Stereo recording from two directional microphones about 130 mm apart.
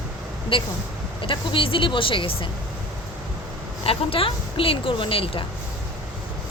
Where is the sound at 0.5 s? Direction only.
45° left (ahead or behind).